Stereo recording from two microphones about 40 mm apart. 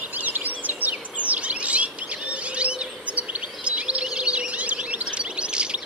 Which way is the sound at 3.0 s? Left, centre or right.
Right.